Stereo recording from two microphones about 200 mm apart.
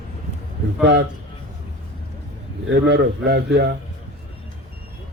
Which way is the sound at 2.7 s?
55° right (ahead or behind).